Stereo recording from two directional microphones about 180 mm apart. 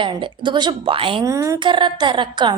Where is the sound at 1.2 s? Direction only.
15° right (ahead or behind).